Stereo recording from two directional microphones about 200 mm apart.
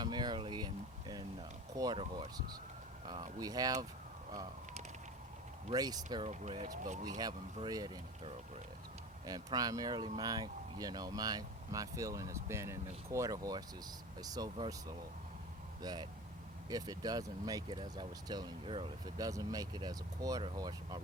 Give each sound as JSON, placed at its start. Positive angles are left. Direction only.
{"t": 0.0, "sound": "speech", "side_deg": -20}
{"t": 5.7, "sound": "speech", "side_deg": -20}
{"t": 7.5, "sound": "speech", "side_deg": -20}